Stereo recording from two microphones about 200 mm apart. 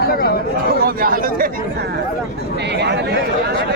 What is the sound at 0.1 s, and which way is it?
Chatter, 50° left (ahead or behind).